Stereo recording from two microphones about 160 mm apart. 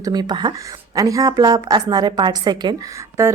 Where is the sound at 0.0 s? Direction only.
25° right (ahead or behind).